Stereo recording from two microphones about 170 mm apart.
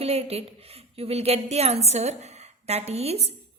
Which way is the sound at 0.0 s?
35° right (ahead or behind).